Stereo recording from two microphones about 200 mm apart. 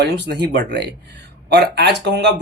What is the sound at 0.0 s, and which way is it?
Speech, 60° right (ahead or behind).